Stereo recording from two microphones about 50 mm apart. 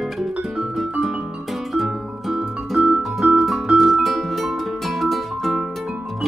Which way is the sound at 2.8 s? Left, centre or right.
Right.